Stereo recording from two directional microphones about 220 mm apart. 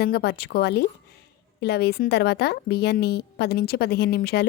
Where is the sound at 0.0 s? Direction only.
45° left (ahead or behind).